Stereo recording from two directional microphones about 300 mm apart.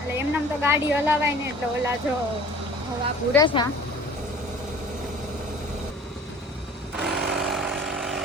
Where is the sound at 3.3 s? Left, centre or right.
Centre.